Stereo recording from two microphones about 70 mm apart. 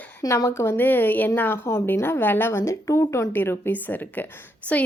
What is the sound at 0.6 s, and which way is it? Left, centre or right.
A woman's voice, left.